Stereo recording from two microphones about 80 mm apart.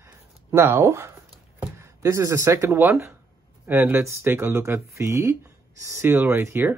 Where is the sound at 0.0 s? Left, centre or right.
Right.